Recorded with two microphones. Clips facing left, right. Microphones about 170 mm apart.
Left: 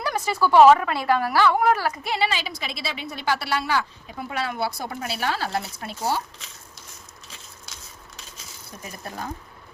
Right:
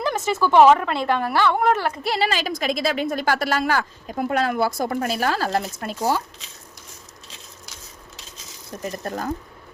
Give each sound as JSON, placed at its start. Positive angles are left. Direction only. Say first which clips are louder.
{"t": 0.3, "sound": "a woman's voice", "louder": "even", "side_deg": 10}
{"t": 2.0, "sound": "a woman's voice", "louder": "right 5 dB", "side_deg": -40}
{"t": 9.0, "sound": "a woman's voice", "louder": "right 5 dB", "side_deg": -45}